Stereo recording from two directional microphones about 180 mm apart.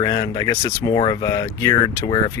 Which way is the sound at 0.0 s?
20° left (ahead or behind).